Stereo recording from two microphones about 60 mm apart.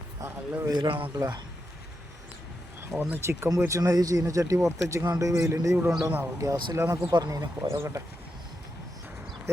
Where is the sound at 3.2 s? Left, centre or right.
Right.